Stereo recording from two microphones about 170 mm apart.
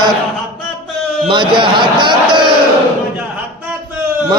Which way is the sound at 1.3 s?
30° right (ahead or behind).